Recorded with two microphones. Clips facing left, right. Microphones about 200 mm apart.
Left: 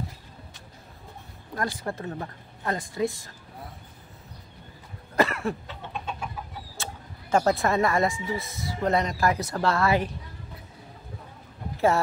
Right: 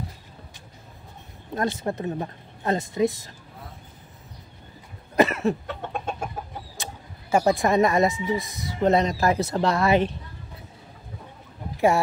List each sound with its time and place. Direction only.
1.5 s speech: 25° right (ahead or behind)
5.1 s cough: 20° right (ahead or behind)
5.7 s chicken: 50° right (ahead or behind)
6.8 s speech: 10° right (ahead or behind)